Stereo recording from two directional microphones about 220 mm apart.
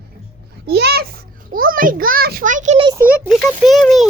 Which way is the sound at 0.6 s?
45° right (ahead or behind).